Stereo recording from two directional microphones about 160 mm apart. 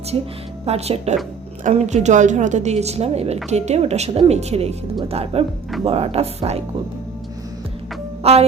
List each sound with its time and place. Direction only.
0.6 s a woman's voice: 40° right (ahead or behind)
8.2 s speech: 40° right (ahead or behind)